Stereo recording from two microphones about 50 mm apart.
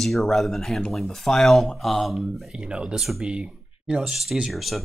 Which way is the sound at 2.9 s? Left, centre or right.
Centre.